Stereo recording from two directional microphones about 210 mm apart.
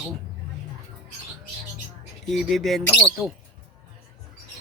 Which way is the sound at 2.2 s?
Centre (ahead or behind).